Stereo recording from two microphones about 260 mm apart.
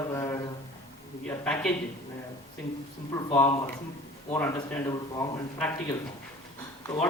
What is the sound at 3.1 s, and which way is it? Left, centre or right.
Speech, centre.